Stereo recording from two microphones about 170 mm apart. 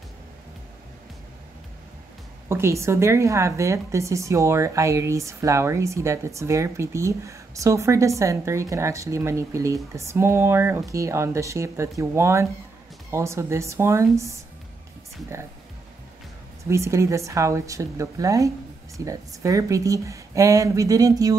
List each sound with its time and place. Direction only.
2.4 s a woman's voice: 15° right (ahead or behind)
16.6 s a woman's voice: 15° right (ahead or behind)